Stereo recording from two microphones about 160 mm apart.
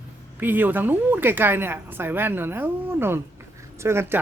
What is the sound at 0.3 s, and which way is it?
A woman's voice, 10° right (ahead or behind).